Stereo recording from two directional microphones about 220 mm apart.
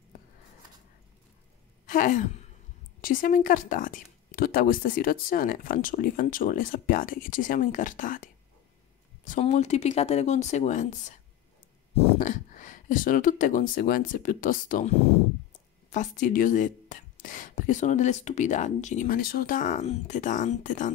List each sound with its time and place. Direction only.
1.9 s a sound: 35° left (ahead or behind)
3.0 s speech: 40° left (ahead or behind)
15.9 s speech: 35° left (ahead or behind)